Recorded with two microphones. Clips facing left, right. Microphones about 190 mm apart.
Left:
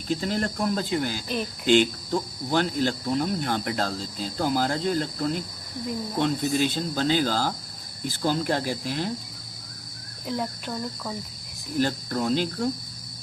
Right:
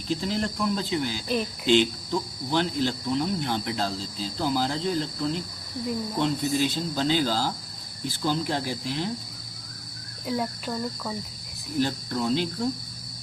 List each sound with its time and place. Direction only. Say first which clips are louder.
0.1 s cricket: left 1 dB; 50° left (ahead or behind)
10.2 s speech: right 1 dB; centre (ahead or behind)
11.8 s cricket: left 1 dB; 50° left (ahead or behind)